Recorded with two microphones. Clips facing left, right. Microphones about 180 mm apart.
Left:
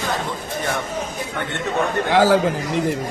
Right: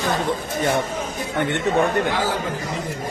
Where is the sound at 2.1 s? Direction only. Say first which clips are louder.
Left 9 dB; 90° left.